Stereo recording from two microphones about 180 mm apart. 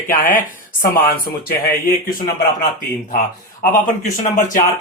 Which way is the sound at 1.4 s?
55° left (ahead or behind).